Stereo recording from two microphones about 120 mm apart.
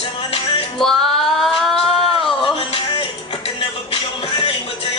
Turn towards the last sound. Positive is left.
turn(degrees=50)  # may be behind; listen again after turning